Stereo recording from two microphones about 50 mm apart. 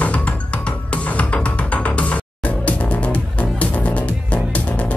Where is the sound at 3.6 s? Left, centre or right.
Left.